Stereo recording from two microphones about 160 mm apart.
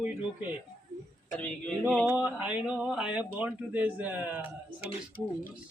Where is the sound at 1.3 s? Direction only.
5° left (ahead or behind).